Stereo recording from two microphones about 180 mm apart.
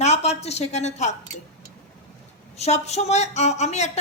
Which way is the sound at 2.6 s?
35° left (ahead or behind).